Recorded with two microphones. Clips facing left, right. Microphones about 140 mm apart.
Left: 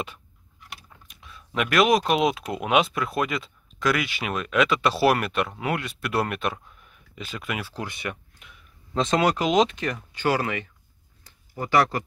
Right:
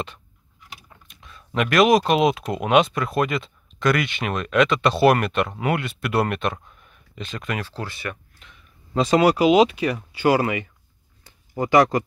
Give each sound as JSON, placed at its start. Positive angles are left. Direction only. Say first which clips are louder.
{"t": 0.7, "sound": "speech", "louder": "right 1 dB", "side_deg": 0}
{"t": 8.9, "sound": "speech", "louder": "right 5 dB", "side_deg": -5}